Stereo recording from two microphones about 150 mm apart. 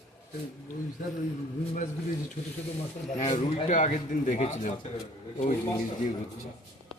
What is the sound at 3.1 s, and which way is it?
Speech, 55° left (ahead or behind).